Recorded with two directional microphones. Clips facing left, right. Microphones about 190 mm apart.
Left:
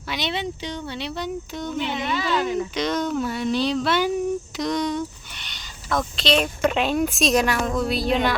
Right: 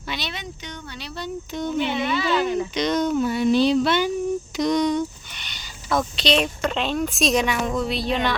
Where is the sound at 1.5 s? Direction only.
Centre (ahead or behind).